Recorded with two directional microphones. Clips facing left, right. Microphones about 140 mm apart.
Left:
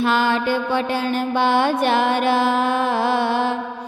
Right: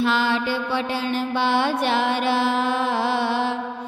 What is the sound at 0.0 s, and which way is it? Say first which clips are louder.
Music: left 3 dB; 50° left (ahead or behind).